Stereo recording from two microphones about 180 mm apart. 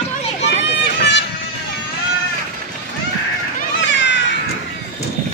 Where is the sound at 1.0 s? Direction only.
75° left (ahead or behind).